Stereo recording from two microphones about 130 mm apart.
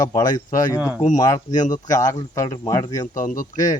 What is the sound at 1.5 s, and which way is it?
Speech, 75° left (ahead or behind).